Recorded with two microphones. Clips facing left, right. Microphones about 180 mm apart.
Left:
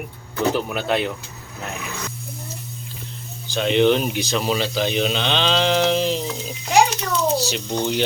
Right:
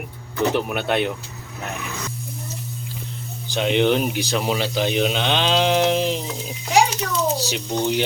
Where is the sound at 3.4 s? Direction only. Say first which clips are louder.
Left 2 dB; 15° right (ahead or behind).